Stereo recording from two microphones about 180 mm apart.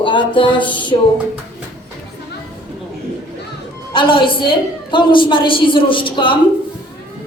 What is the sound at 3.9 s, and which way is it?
A woman's voice, 30° left (ahead or behind).